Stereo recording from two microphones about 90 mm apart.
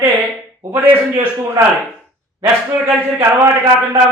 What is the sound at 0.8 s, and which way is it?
Speech, 20° right (ahead or behind).